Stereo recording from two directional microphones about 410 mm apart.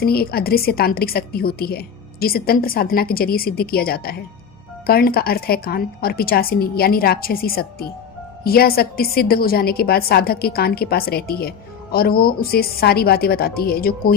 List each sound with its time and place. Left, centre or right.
0.0 s a woman's voice: left